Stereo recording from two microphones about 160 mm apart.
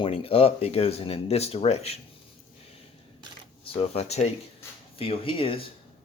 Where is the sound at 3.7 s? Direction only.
40° left (ahead or behind).